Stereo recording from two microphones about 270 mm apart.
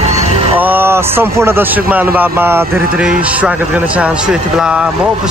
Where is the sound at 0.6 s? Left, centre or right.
Centre.